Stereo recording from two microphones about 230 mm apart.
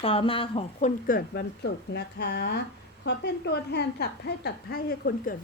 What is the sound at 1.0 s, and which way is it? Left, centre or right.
A woman's voice, left.